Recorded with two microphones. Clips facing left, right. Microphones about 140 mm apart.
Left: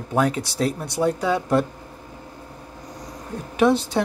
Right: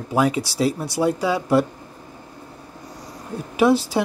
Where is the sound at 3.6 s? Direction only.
5° right (ahead or behind).